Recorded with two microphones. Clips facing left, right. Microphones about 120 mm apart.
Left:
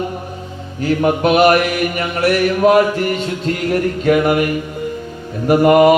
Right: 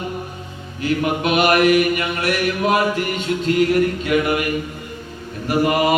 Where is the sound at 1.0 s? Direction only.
40° left (ahead or behind).